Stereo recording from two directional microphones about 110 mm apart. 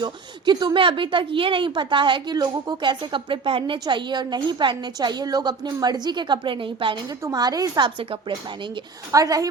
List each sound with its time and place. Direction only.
0.0 s a woman's voice: 40° right (ahead or behind)
7.3 s a woman's voice: 35° right (ahead or behind)
7.9 s speech: 55° right (ahead or behind)
9.1 s a woman's voice: 30° right (ahead or behind)